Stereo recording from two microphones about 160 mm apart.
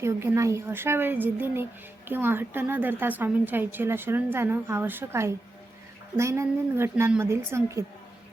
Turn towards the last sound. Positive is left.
turn(degrees=-15)  # may be behind; listen again after turning